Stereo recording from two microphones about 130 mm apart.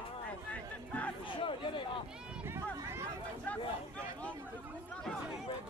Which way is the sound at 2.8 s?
20° right (ahead or behind).